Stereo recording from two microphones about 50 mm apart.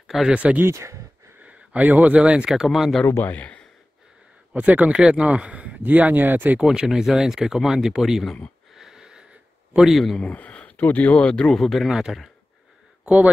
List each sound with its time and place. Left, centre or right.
0.0 s a sound: centre
0.3 s speech: right
0.7 s speech: right
1.4 s speech: right; by 2.9 s centre
3.3 s speech: left
4.6 s speech: right
6.6 s speech: centre
8.7 s sniff: centre
9.8 s a man's voice: centre
10.2 s speech: left
11.2 s speech: centre
11.5 s a man's voice: centre
11.9 s speech: centre
13.0 s speech: right